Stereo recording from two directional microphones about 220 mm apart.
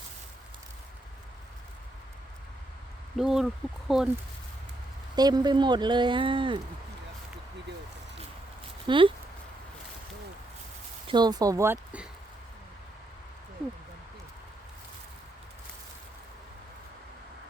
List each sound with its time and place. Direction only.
3.2 s speech: centre (ahead or behind)
5.1 s speech: 20° right (ahead or behind)
8.9 s speech: 25° right (ahead or behind)
11.1 s speech: 20° right (ahead or behind)